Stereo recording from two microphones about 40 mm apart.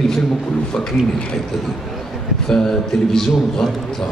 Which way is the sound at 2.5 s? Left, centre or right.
Centre.